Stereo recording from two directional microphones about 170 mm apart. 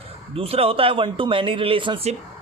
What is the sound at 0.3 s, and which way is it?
Speech, 35° right (ahead or behind).